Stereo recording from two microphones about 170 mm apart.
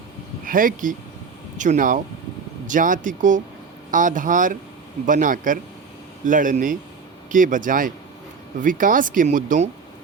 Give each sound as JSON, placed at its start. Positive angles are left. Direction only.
{"t": 0.4, "sound": "speech", "side_deg": -55}